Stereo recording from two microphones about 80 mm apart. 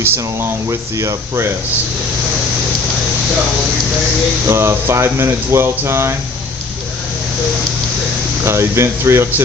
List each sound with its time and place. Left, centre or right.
0.0 s speech: right
4.4 s speech: right
8.4 s speech: right